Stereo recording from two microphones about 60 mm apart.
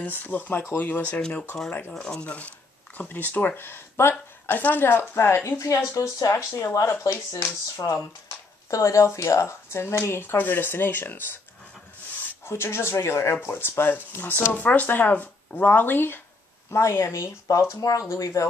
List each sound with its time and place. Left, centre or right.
0.0 s speech: left
4.1 s a woman's voice: left
5.9 s speech: left
10.3 s speech: left
12.4 s speech: left
14.5 s speech: left
16.7 s speech: left
18.0 s speech: left